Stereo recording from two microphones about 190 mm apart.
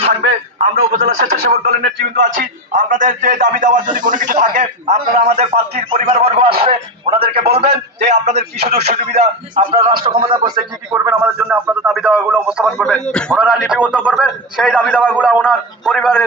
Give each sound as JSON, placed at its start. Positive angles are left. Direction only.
{"t": 0.2, "sound": "a man's voice", "side_deg": -50}
{"t": 10.9, "sound": "a man's voice", "side_deg": -10}
{"t": 12.6, "sound": "a man's voice", "side_deg": 5}
{"t": 13.4, "sound": "a man's voice", "side_deg": -5}